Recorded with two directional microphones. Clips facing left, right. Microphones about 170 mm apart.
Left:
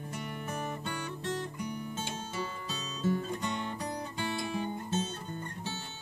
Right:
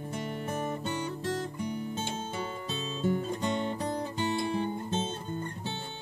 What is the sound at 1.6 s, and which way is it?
Guitar, 25° right (ahead or behind).